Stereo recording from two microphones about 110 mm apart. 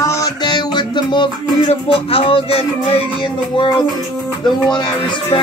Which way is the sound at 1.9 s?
55° left (ahead or behind).